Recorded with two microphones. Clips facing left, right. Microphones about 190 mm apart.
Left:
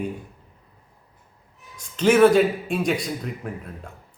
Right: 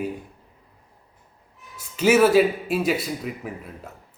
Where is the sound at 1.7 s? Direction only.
5° right (ahead or behind).